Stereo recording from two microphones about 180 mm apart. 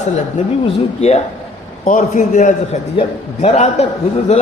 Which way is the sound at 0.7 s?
35° left (ahead or behind).